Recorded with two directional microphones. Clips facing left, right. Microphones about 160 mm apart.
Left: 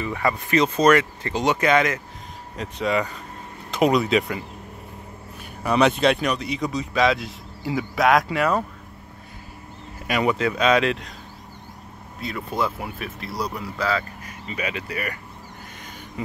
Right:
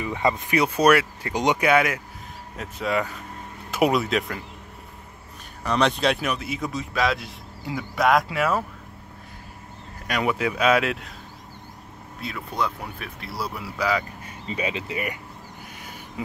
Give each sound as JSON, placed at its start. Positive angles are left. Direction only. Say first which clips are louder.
{"t": 0.0, "sound": "speech", "louder": "even", "side_deg": -20}
{"t": 5.6, "sound": "speech", "louder": "left 3 dB", "side_deg": 10}
{"t": 10.0, "sound": "speech", "louder": "left 3 dB", "side_deg": 0}
{"t": 10.3, "sound": "speech", "louder": "right 1 dB", "side_deg": -10}
{"t": 12.2, "sound": "speech", "louder": "left 2 dB", "side_deg": 0}
{"t": 14.2, "sound": "speech", "louder": "right 1 dB", "side_deg": -30}